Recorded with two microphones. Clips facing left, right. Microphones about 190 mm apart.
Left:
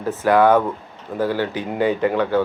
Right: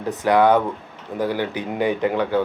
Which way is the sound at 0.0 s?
15° right (ahead or behind).